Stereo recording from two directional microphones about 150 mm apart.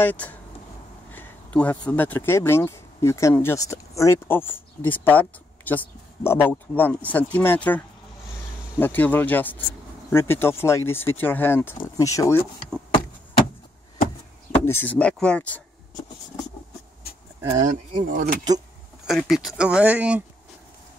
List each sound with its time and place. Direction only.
0.0 s speech: 10° left (ahead or behind)
14.6 s speech: 15° left (ahead or behind)
17.6 s speech: 60° right (ahead or behind)
19.0 s speech: centre (ahead or behind)